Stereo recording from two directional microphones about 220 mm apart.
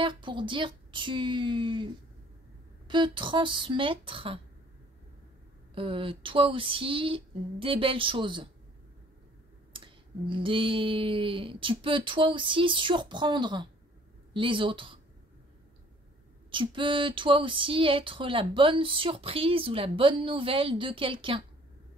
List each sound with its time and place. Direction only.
0.0 s speech: 20° right (ahead or behind)
2.9 s speech: 20° right (ahead or behind)
5.8 s speech: 25° right (ahead or behind)
9.7 s speech: 20° right (ahead or behind)
16.4 s speech: 20° right (ahead or behind)